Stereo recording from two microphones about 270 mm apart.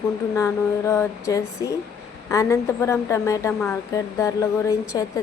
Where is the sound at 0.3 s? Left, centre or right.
Centre.